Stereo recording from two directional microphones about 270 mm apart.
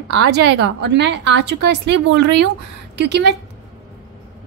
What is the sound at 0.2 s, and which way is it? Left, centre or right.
A woman's voice, right.